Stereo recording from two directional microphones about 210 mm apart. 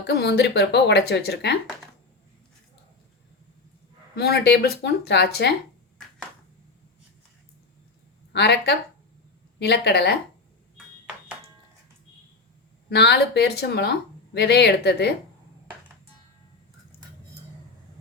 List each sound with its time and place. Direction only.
0.1 s speech: 50° left (ahead or behind)
4.1 s speech: 50° left (ahead or behind)
8.3 s speech: 55° left (ahead or behind)
12.9 s speech: 50° left (ahead or behind)